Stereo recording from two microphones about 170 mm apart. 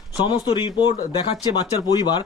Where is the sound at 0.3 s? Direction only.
30° left (ahead or behind).